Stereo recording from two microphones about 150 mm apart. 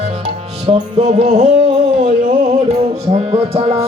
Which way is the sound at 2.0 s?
55° right (ahead or behind).